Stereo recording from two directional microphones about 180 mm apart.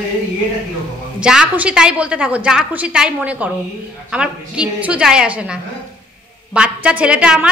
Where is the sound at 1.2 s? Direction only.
5° right (ahead or behind).